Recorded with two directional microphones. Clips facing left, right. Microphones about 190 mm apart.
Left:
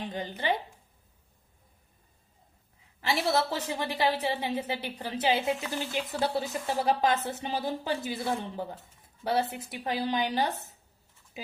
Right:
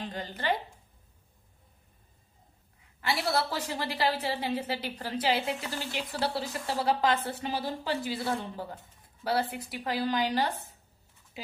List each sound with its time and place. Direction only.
0.0 s a woman's voice: 15° left (ahead or behind)
3.0 s a woman's voice: 20° left (ahead or behind)